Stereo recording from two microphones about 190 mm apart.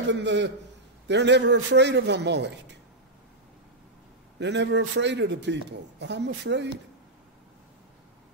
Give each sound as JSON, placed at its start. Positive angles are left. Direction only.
{"t": 0.1, "sound": "a man's voice", "side_deg": -70}
{"t": 4.4, "sound": "a man's voice", "side_deg": -65}